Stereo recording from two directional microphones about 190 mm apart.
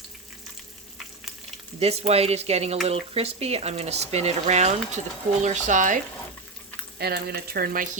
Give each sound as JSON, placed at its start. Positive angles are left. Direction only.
{"t": 1.8, "sound": "speech", "side_deg": -35}
{"t": 7.0, "sound": "speech", "side_deg": -55}